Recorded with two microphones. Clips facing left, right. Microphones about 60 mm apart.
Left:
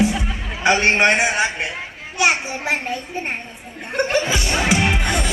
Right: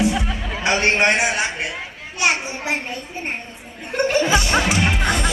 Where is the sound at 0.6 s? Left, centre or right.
Left.